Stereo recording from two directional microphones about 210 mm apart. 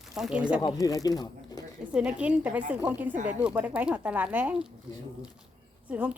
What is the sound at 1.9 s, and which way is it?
Speech, 5° right (ahead or behind).